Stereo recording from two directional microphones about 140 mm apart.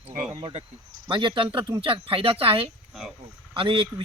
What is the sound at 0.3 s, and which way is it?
A man's voice, 40° right (ahead or behind).